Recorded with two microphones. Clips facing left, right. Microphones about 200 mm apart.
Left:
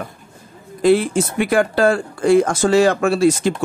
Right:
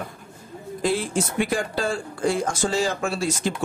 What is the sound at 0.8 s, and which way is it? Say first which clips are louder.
Speech: left 9 dB; 65° left (ahead or behind).